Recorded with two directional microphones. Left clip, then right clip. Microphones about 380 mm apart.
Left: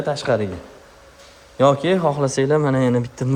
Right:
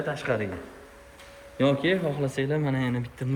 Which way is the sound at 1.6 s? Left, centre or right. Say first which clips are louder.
Left 9 dB; centre.